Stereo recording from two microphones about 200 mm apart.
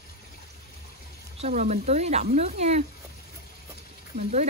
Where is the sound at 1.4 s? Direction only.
35° right (ahead or behind).